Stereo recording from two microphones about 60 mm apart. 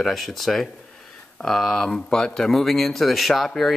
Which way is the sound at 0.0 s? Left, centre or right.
Centre.